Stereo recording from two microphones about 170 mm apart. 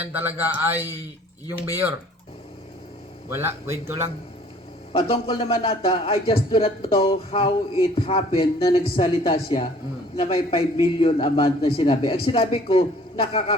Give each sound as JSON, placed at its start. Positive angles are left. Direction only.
{"t": 0.1, "sound": "speech", "side_deg": -10}
{"t": 3.2, "sound": "speech", "side_deg": -15}
{"t": 4.9, "sound": "a man's voice", "side_deg": 35}